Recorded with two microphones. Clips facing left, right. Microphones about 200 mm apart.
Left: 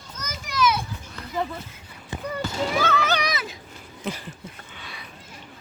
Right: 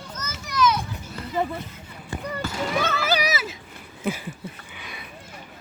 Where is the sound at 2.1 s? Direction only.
20° left (ahead or behind).